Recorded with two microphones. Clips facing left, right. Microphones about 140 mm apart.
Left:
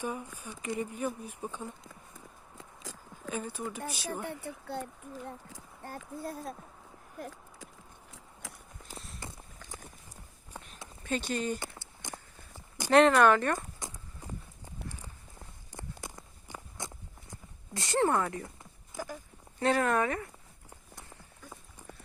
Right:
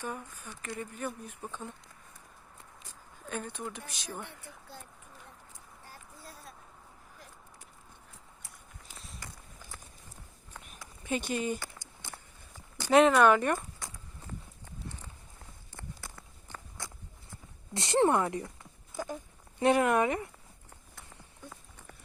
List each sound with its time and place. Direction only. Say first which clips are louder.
0.0 s speech: left 3 dB; 10° left (ahead or behind)
2.6 s a sound: left 9 dB; 90° left
3.2 s speech: left 2 dB; 5° left (ahead or behind)
4.3 s speech: left 11 dB; 60° left (ahead or behind)
7.2 s a sound: left 15 dB; 90° left
9.0 s walk: left 2 dB; centre (ahead or behind)
9.2 s walk: left 3 dB; 20° left (ahead or behind)
11.0 s speech: even; 15° right (ahead or behind)
12.0 s walk: left 5 dB; 15° left (ahead or behind)
12.9 s speech: even; 5° right (ahead or behind)
13.6 s horse: left 2 dB; 20° left (ahead or behind)
15.7 s walk: left 3 dB; 20° left (ahead or behind)
17.7 s speech: right 2 dB; 25° right (ahead or behind)
21.5 s a sound: left 3 dB; 15° left (ahead or behind)